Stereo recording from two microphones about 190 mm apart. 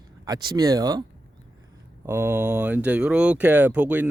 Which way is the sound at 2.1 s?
15° right (ahead or behind).